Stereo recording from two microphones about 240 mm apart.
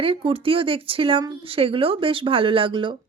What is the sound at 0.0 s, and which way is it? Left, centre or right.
Speech, right.